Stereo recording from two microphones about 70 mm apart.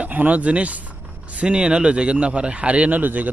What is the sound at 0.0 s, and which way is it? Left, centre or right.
A man's voice, right.